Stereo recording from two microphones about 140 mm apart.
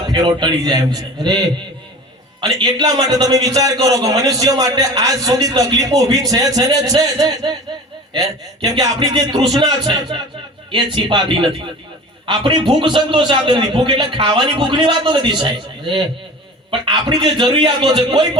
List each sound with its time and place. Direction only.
0.1 s a man's voice: 30° right (ahead or behind)
2.4 s a man's voice: 30° right (ahead or behind)